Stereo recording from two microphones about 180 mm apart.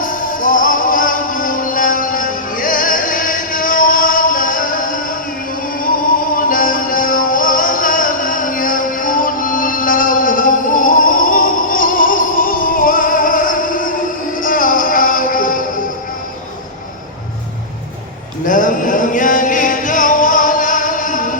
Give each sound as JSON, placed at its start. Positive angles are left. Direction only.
{"t": 0.0, "sound": "music", "side_deg": 50}
{"t": 6.3, "sound": "music", "side_deg": 50}
{"t": 18.4, "sound": "music", "side_deg": 45}